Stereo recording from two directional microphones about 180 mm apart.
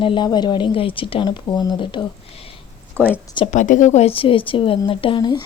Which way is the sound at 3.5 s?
45° left (ahead or behind).